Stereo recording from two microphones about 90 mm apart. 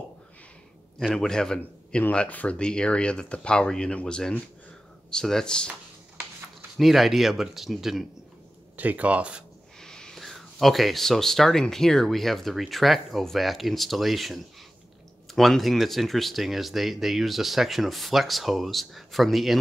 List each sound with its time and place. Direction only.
1.1 s speech: 5° left (ahead or behind)
6.8 s speech: centre (ahead or behind)
8.7 s speech: 20° right (ahead or behind)
9.8 s speech: 5° left (ahead or behind)